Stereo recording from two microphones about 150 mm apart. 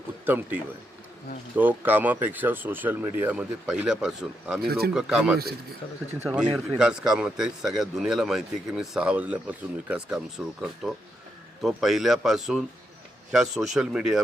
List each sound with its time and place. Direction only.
0.3 s speech: 15° right (ahead or behind)
4.6 s speech: 90° right
4.9 s a man's voice: 5° right (ahead or behind)